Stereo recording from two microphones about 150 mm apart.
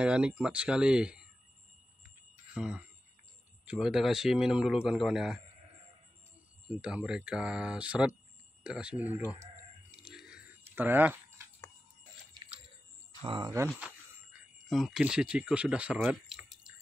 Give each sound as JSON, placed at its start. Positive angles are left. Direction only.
{"t": 0.0, "sound": "speech", "side_deg": -5}
{"t": 2.5, "sound": "a man's voice", "side_deg": -5}
{"t": 6.7, "sound": "speech", "side_deg": -5}
{"t": 10.0, "sound": "a sound", "side_deg": -5}
{"t": 13.2, "sound": "speech", "side_deg": -30}
{"t": 14.7, "sound": "speech", "side_deg": 0}